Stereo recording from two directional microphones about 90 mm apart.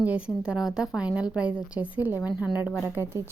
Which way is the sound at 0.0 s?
15° right (ahead or behind).